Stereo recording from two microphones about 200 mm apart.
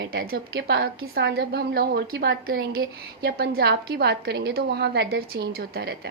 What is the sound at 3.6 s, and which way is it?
A woman's voice, 55° right (ahead or behind).